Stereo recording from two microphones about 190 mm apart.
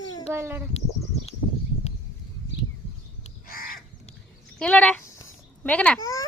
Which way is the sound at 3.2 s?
50° left (ahead or behind).